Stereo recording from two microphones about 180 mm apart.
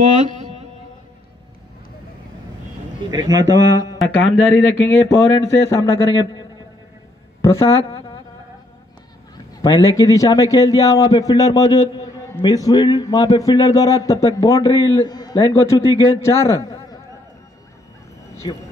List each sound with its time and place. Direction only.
3.1 s speech: 20° right (ahead or behind)
4.0 s speech: 10° left (ahead or behind)
7.4 s speech: 15° left (ahead or behind)
7.7 s a man's voice: 30° left (ahead or behind)
9.6 s a man's voice: 20° left (ahead or behind)
18.3 s a sound: 20° left (ahead or behind)